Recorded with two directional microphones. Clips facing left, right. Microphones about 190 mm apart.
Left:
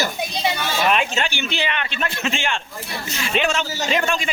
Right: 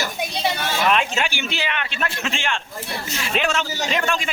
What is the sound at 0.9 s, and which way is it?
Speech, 5° left (ahead or behind).